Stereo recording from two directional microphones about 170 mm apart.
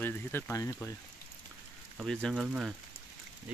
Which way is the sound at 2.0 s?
5° left (ahead or behind).